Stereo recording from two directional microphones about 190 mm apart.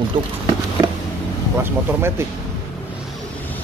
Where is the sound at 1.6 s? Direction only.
10° right (ahead or behind).